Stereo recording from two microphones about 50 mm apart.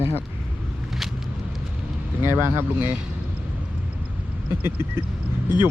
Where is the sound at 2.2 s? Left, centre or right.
Right.